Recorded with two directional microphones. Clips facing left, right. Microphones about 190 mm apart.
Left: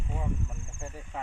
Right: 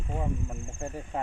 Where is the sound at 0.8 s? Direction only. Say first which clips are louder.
Right 6 dB; 45° right (ahead or behind).